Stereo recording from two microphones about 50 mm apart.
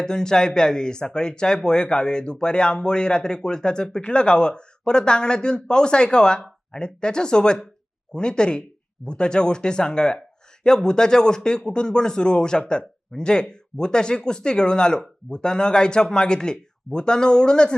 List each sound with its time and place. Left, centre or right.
0.0 s speech: centre